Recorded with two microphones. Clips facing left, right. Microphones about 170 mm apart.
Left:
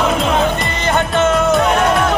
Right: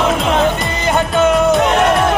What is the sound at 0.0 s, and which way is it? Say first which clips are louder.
Music: right 1 dB; centre (ahead or behind).